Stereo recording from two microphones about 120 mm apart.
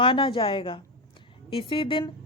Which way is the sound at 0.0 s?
45° left (ahead or behind).